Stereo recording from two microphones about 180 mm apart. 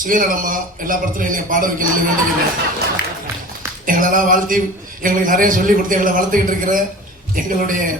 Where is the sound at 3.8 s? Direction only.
50° right (ahead or behind).